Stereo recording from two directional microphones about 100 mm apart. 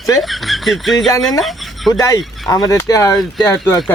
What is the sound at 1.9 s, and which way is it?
Speech, 40° left (ahead or behind).